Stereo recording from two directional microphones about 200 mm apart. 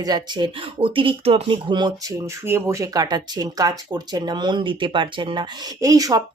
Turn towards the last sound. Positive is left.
turn(degrees=-15)  # may be behind; listen again after turning